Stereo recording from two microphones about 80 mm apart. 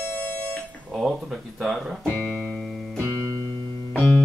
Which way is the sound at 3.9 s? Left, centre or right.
Centre.